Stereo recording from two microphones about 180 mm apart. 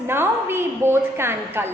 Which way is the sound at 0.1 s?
15° right (ahead or behind).